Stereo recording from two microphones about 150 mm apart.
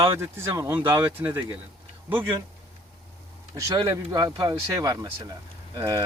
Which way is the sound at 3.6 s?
20° right (ahead or behind).